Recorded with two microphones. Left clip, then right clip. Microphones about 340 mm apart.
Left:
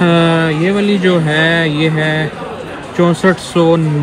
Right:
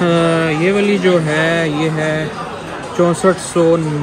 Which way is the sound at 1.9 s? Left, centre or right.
Left.